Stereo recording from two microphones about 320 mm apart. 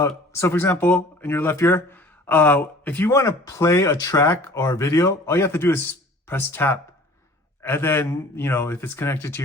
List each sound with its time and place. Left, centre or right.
0.0 s speech: centre